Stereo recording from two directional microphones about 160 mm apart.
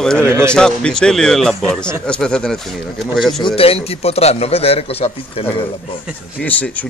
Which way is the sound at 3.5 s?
35° left (ahead or behind).